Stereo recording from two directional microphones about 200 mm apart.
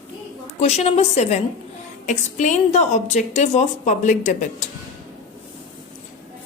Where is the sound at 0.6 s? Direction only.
30° left (ahead or behind).